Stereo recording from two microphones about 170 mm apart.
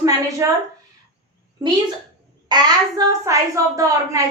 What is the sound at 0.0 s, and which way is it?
Speech, 20° right (ahead or behind).